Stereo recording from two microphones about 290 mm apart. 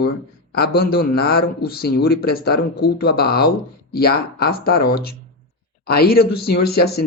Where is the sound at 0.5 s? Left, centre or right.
Left.